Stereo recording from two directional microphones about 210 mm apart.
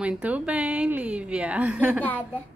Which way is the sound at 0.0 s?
5° right (ahead or behind).